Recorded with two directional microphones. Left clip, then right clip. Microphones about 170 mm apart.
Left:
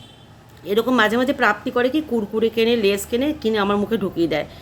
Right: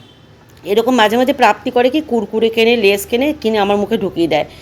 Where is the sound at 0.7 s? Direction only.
10° right (ahead or behind).